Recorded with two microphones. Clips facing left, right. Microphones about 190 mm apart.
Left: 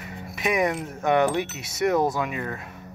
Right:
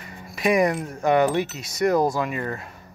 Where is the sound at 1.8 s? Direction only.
Centre (ahead or behind).